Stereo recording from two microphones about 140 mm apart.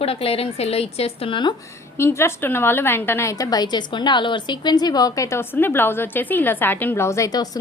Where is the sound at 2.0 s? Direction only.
20° left (ahead or behind).